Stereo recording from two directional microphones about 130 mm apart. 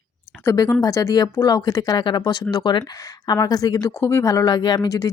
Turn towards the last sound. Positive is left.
turn(degrees=30)  # may be behind; listen again after turning